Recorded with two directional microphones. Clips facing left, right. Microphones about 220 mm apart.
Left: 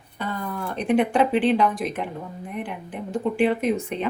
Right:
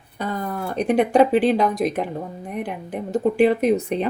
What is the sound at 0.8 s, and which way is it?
Speech, 40° right (ahead or behind).